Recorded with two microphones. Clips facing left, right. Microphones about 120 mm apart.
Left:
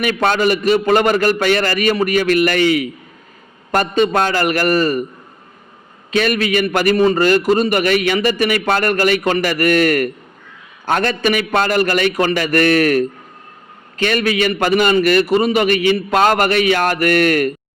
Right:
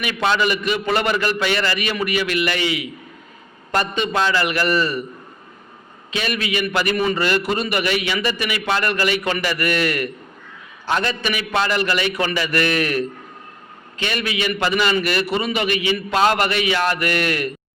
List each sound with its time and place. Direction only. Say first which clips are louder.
0.0 s a man's voice: left 4 dB; 50° left (ahead or behind)
6.1 s a man's voice: left 8 dB; 45° left (ahead or behind)